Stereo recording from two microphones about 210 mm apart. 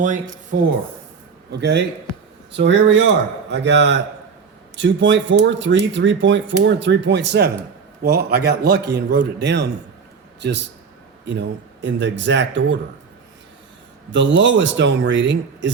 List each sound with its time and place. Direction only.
1.5 s a man's voice: 55° right (ahead or behind)
11.3 s speech: 55° right (ahead or behind)
14.1 s speech: 60° right (ahead or behind)